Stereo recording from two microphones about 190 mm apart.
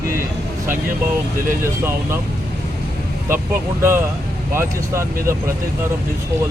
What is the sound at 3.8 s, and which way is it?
Speech, 10° right (ahead or behind).